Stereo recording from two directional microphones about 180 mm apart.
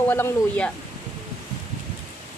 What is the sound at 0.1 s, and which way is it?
Speech, 10° left (ahead or behind).